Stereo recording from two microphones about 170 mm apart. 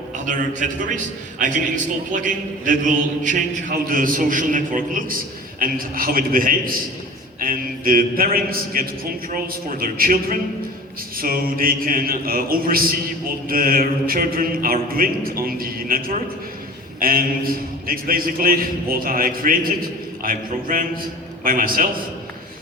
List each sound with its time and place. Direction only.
1.4 s a man's voice: 50° right (ahead or behind)
5.5 s mantra: 55° right (ahead or behind)